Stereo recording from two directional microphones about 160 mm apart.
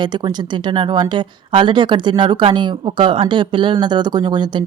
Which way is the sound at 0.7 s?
30° right (ahead or behind).